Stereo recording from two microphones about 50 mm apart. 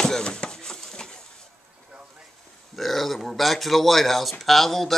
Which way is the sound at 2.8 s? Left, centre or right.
Centre.